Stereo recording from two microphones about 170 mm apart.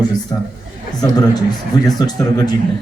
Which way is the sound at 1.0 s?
25° left (ahead or behind).